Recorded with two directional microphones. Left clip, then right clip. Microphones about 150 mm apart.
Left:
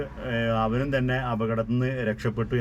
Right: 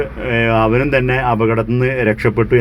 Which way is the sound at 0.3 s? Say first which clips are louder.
Right 12 dB; 20° right (ahead or behind).